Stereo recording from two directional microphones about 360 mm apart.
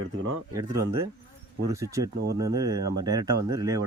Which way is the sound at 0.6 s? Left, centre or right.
Centre.